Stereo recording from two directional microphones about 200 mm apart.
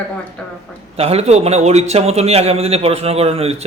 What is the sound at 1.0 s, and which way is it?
A man's voice, 30° right (ahead or behind).